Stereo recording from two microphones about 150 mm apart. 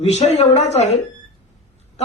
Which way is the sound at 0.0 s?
45° left (ahead or behind).